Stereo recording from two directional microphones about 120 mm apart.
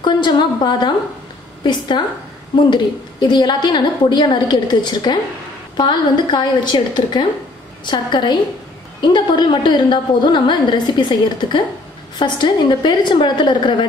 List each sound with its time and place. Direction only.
0.0 s a woman's voice: 40° left (ahead or behind)